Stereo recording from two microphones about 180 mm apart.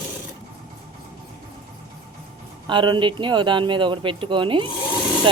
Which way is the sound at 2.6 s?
25° right (ahead or behind).